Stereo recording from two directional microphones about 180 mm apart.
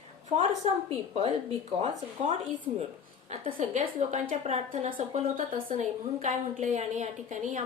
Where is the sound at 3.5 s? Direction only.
45° right (ahead or behind).